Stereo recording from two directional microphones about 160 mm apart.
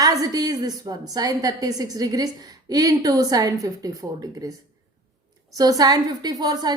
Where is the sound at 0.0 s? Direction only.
25° right (ahead or behind).